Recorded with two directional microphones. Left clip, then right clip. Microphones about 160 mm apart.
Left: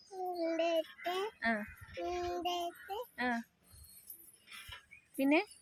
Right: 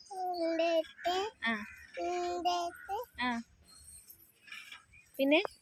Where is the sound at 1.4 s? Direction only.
35° left (ahead or behind).